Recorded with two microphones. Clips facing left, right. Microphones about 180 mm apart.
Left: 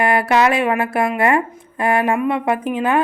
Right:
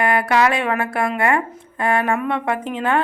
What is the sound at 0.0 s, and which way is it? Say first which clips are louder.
Speech: left 2 dB; 25° left (ahead or behind).